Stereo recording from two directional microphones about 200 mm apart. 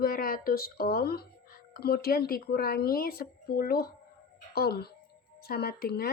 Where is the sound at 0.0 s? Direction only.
45° left (ahead or behind).